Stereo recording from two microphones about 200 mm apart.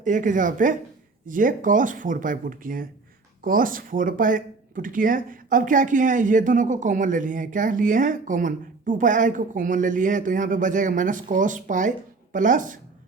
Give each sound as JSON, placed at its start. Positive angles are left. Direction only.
{"t": 0.0, "sound": "speech", "side_deg": -40}